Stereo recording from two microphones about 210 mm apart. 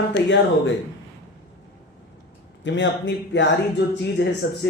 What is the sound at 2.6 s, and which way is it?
Speech, 60° left (ahead or behind).